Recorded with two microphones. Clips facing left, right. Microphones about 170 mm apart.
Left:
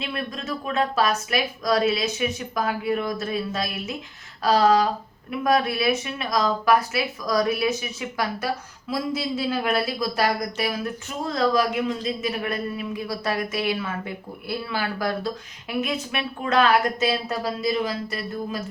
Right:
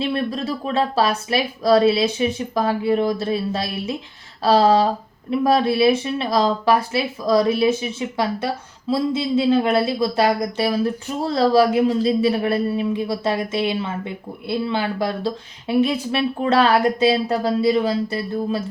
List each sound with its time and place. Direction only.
0.0 s speech: 35° right (ahead or behind)